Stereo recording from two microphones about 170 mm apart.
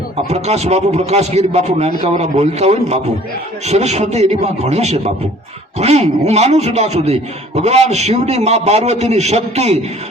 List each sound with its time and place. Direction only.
0.3 s a man's voice: 40° right (ahead or behind)